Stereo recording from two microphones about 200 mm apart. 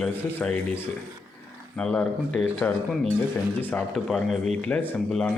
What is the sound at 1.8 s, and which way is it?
A man's voice, 5° left (ahead or behind).